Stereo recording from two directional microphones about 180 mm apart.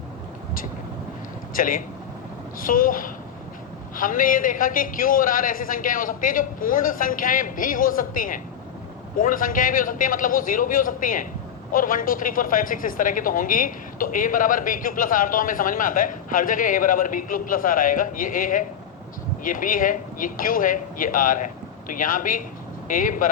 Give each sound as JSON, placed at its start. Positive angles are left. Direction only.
{"t": 1.5, "sound": "a woman's voice", "side_deg": 50}